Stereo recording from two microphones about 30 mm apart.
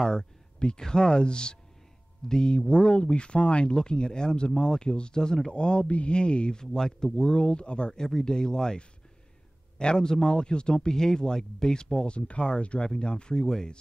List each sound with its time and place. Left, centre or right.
0.7 s speech: left
2.5 s speech: left
5.5 s speech: left
5.9 s mantra: left
6.1 s speech: left
6.6 s speech: centre
7.2 s speech: left
7.9 s speech: centre
9.8 s speech: left
12.2 s speech: left
13.4 s speech: centre